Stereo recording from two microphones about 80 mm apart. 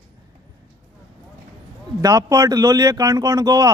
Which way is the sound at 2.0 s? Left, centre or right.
Right.